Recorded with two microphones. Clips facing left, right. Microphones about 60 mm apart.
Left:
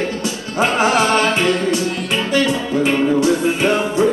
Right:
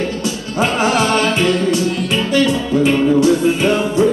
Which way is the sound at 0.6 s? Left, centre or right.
Left.